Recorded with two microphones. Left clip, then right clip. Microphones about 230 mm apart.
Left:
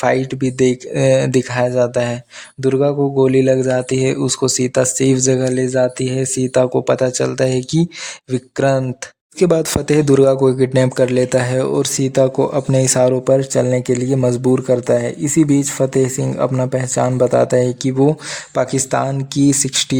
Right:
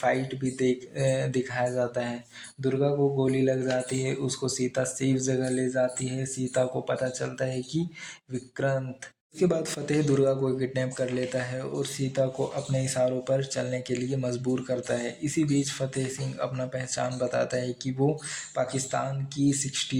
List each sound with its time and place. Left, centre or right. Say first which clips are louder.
0.0 s speech: left 11 dB; left